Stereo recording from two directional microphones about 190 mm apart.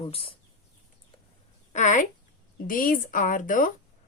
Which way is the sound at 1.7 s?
40° left (ahead or behind).